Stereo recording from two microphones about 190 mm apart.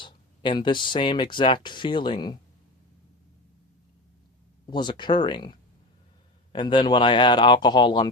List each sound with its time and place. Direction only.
0.0 s speech: 25° left (ahead or behind)
4.6 s speech: 25° left (ahead or behind)